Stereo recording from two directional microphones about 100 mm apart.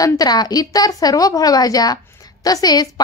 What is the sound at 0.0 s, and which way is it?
A woman's voice, 40° left (ahead or behind).